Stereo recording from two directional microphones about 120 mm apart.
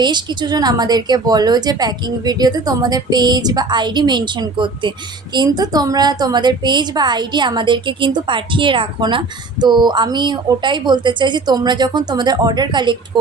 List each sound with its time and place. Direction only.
0.0 s a woman's voice: 40° right (ahead or behind)